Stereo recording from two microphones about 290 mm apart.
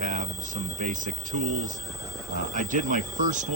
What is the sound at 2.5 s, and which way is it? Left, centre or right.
Speech, right.